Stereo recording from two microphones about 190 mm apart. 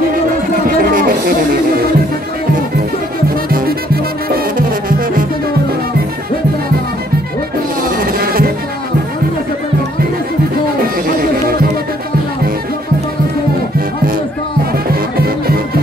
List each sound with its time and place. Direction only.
0.7 s music: 50° right (ahead or behind)
3.4 s music: 50° right (ahead or behind)
7.9 s music: 50° right (ahead or behind)
14.9 s music: 55° right (ahead or behind)